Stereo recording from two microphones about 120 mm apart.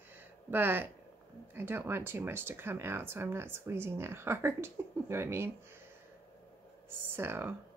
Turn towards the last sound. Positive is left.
turn(degrees=-20)  # may be behind; listen again after turning